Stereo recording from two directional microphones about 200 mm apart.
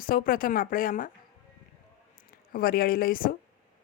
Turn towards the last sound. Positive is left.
turn(degrees=45)  # may be behind; listen again after turning